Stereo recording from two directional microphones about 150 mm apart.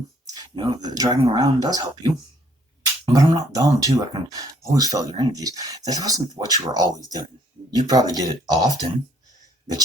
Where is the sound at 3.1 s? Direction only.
25° right (ahead or behind).